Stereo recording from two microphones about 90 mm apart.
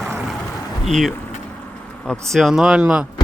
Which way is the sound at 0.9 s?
Centre (ahead or behind).